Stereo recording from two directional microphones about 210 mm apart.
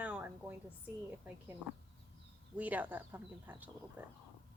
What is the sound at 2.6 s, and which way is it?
Speech, 10° right (ahead or behind).